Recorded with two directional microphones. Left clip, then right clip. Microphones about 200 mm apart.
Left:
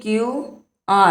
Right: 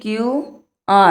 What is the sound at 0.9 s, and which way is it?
Speech, 30° right (ahead or behind).